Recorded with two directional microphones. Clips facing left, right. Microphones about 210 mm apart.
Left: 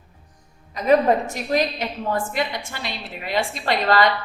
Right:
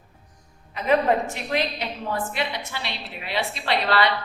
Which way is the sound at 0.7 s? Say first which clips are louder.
Left 4 dB; 40° left (ahead or behind).